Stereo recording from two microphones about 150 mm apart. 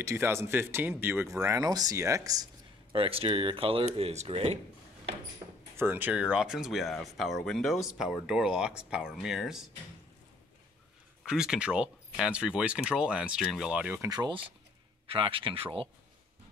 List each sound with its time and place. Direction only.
0.0 s speech: 15° right (ahead or behind)
2.9 s speech: 40° right (ahead or behind)
5.8 s speech: 15° right (ahead or behind)
11.2 s speech: 5° right (ahead or behind)
14.0 s speech: 30° right (ahead or behind)